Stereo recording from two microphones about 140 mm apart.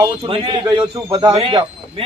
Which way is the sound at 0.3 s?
35° right (ahead or behind).